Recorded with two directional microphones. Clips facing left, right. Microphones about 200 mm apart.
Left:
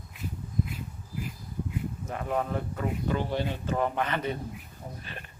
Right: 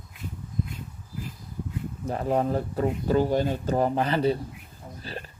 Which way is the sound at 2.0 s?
35° right (ahead or behind).